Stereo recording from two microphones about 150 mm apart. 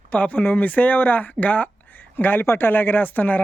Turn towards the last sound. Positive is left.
turn(degrees=10)  # may be behind; listen again after turning